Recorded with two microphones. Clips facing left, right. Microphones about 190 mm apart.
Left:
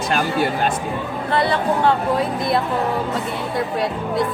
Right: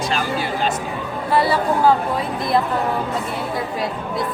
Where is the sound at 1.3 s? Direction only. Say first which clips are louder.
Right 1 dB; 10° right (ahead or behind).